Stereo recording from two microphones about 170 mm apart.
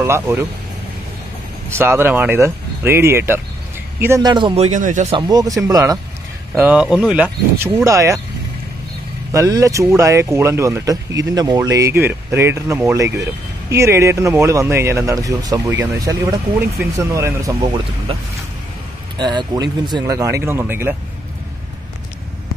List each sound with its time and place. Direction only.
0.0 s speech: 15° right (ahead or behind)
1.7 s speech: 15° right (ahead or behind)
4.6 s speech: 50° right (ahead or behind)
5.1 s speech: 20° right (ahead or behind)
6.5 s speech: 5° right (ahead or behind)
9.3 s speech: 20° right (ahead or behind)
19.1 s speech: 25° right (ahead or behind)